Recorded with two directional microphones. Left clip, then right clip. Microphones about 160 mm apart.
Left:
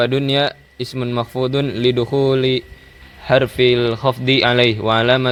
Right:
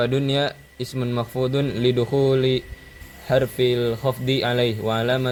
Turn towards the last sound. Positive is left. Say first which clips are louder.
# left 7 dB
turn(degrees=60)  # may be behind; listen again after turning